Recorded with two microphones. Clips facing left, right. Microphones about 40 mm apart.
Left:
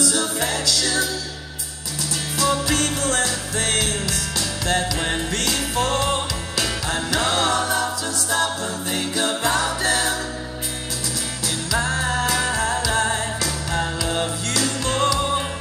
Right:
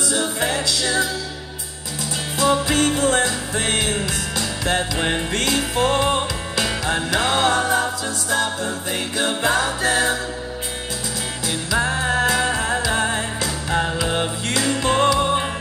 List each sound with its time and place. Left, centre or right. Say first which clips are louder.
0.0 s music: right 1 dB; right
2.3 s music: right 3 dB; right
11.4 s music: right 2 dB; right